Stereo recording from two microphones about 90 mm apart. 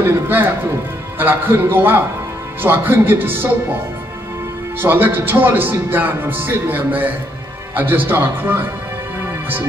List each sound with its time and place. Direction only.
0.0 s speech: 25° right (ahead or behind)
4.8 s speech: 25° right (ahead or behind)